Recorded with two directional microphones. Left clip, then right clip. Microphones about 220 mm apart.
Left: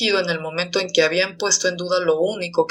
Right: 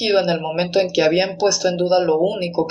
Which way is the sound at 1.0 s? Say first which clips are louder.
Even; 35° left (ahead or behind).